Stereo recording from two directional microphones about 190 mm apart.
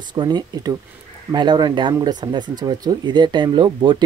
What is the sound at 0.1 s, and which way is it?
Speech, 20° right (ahead or behind).